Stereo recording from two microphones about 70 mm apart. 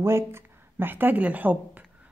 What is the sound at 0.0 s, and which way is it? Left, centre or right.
Speech, right.